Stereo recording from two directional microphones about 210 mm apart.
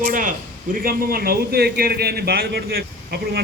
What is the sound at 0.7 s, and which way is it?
A man's voice, 45° right (ahead or behind).